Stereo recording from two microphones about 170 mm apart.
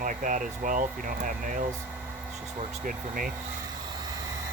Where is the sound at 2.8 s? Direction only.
55° right (ahead or behind).